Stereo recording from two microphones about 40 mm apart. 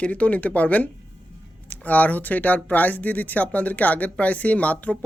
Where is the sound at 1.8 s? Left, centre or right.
Left.